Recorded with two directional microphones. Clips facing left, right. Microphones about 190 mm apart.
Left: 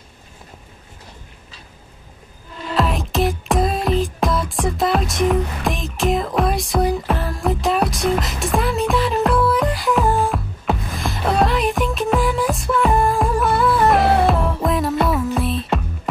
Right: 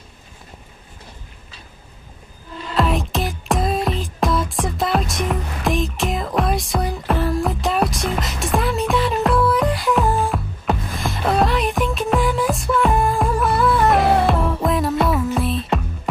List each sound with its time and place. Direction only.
2.7 s music: centre (ahead or behind)